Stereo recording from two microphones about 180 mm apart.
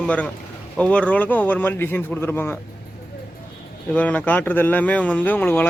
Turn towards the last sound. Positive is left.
turn(degrees=10)  # may be behind; listen again after turning